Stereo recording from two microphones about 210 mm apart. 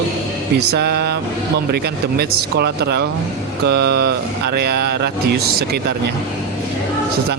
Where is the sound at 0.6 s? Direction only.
50° right (ahead or behind).